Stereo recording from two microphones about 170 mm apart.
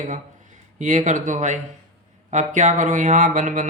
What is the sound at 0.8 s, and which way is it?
Mantra, 45° right (ahead or behind).